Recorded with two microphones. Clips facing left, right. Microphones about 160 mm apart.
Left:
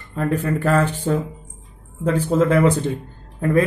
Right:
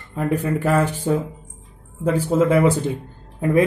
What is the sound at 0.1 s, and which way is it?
A man's voice, 10° right (ahead or behind).